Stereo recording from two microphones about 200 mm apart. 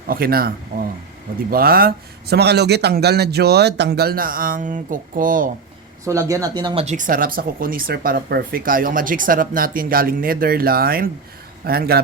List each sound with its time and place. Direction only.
0.1 s speech: 50° right (ahead or behind)
6.1 s speech: 15° right (ahead or behind)
6.8 s speech: 40° right (ahead or behind)